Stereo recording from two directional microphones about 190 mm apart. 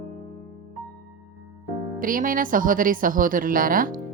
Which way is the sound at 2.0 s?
45° right (ahead or behind).